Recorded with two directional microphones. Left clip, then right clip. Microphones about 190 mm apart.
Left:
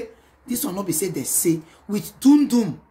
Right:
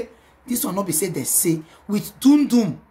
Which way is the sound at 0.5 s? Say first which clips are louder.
Right 2 dB; 15° right (ahead or behind).